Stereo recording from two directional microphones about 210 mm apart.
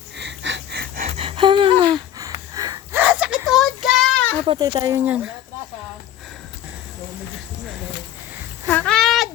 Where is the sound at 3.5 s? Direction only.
Centre (ahead or behind).